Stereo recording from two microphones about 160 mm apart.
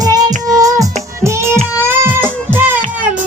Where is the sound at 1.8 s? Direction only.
15° right (ahead or behind).